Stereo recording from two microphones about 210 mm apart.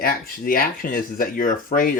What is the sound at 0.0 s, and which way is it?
Speech, 45° left (ahead or behind).